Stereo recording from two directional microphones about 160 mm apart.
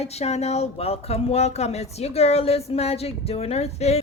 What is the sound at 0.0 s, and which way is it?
A woman's voice, 40° left (ahead or behind).